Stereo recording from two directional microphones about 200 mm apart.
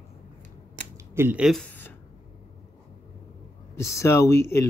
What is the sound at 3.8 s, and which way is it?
Speech, 15° left (ahead or behind).